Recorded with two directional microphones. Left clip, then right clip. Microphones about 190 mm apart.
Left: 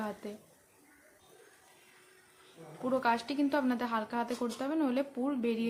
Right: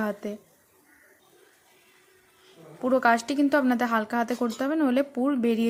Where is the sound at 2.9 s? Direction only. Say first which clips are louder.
Right 9 dB; 35° right (ahead or behind).